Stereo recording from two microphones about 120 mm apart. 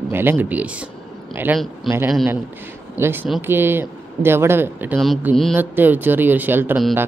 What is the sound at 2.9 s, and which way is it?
A woman's voice, 20° right (ahead or behind).